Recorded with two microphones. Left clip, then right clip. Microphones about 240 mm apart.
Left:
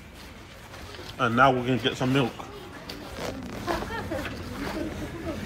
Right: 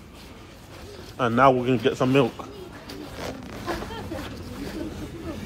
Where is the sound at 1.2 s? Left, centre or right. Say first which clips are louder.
Right 2 dB; centre.